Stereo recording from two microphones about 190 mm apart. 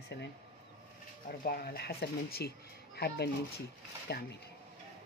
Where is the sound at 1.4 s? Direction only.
50° left (ahead or behind).